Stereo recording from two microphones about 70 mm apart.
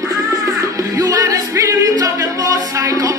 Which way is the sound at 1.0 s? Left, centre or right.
Right.